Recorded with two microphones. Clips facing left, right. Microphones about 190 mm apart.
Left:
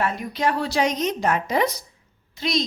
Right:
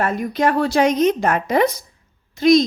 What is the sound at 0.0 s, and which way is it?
A woman's voice, 50° right (ahead or behind).